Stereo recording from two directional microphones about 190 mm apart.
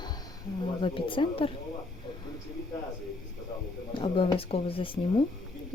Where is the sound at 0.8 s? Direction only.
25° left (ahead or behind).